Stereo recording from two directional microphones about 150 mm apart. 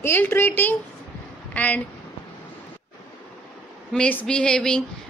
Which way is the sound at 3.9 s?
10° left (ahead or behind).